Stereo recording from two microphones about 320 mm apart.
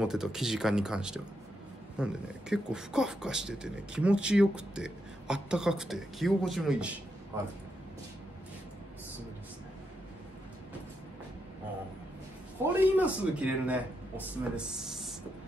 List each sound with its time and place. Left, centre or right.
0.0 s speech: centre
12.7 s speech: centre